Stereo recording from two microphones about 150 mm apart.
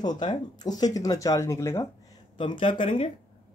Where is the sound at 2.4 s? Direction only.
35° left (ahead or behind).